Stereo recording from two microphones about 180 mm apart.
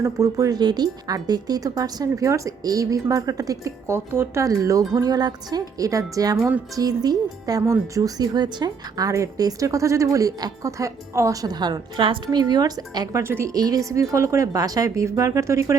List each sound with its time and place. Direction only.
0.0 s a woman's voice: 15° right (ahead or behind)